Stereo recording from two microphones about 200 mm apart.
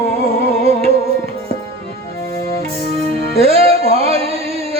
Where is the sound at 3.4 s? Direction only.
30° right (ahead or behind).